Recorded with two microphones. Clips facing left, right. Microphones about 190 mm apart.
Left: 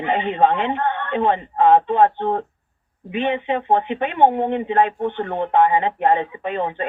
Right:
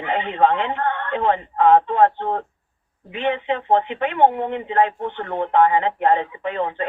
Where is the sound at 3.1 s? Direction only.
20° left (ahead or behind).